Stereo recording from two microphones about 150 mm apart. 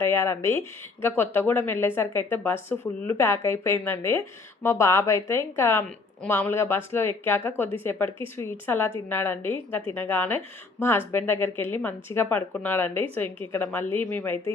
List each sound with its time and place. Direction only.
0.0 s a woman's voice: 15° left (ahead or behind)